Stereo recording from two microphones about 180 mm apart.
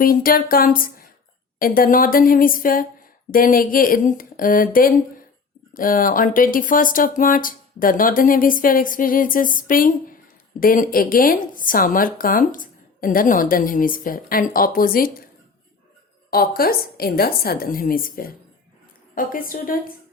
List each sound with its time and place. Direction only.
0.0 s speech: 55° left (ahead or behind)
16.6 s a woman's voice: 55° left (ahead or behind)